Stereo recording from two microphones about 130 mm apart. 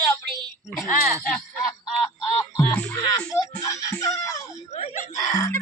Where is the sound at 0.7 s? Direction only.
Centre (ahead or behind).